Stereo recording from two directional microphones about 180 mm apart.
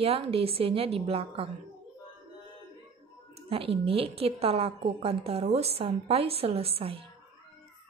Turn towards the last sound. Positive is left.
turn(degrees=-30)  # may be behind; listen again after turning